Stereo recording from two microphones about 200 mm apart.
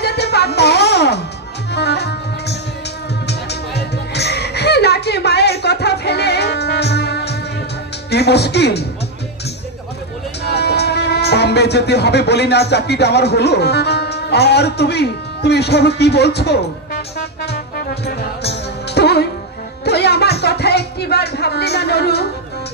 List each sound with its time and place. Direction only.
0.0 s music: 55° left (ahead or behind)
8.1 s speech: 55° left (ahead or behind)
10.4 s speech: 55° left (ahead or behind)
17.5 s music: 55° left (ahead or behind)